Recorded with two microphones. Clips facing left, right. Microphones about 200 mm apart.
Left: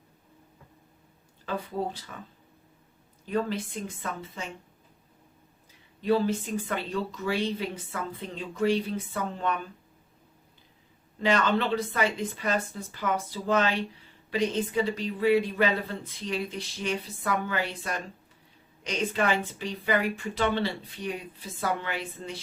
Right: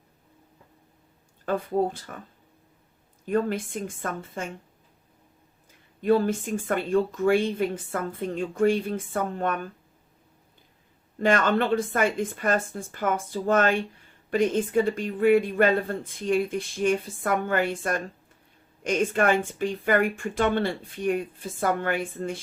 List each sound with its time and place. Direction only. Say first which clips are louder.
1.5 s speech: right 7 dB; 50° right (ahead or behind)
3.2 s speech: right 4 dB; 50° right (ahead or behind)
6.0 s speech: right 3 dB; 50° right (ahead or behind)
11.2 s speech: right 3 dB; 50° right (ahead or behind)